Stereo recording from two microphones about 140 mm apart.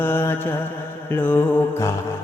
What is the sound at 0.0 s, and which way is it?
Mantra, 15° left (ahead or behind).